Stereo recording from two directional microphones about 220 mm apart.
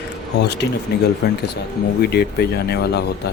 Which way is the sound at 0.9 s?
50° left (ahead or behind).